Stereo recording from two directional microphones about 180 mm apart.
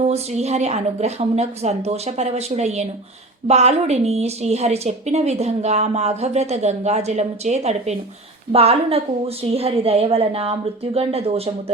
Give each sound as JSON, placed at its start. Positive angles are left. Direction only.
{"t": 0.0, "sound": "a woman's voice", "side_deg": -35}